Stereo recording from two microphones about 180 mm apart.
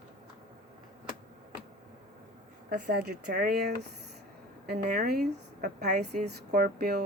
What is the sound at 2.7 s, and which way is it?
Speech, 65° right (ahead or behind).